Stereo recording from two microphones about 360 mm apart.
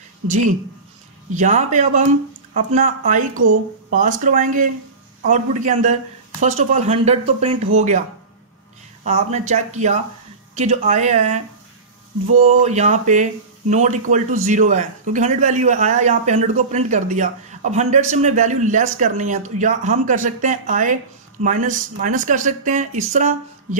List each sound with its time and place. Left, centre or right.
1.3 s speech: centre
9.0 s speech: centre